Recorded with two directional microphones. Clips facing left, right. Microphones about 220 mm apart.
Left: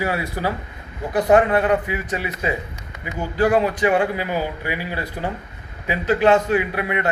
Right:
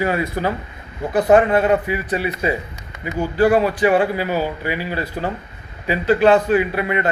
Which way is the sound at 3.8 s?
15° left (ahead or behind).